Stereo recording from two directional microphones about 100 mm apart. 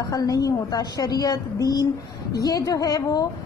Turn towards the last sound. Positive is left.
turn(degrees=40)  # may be behind; listen again after turning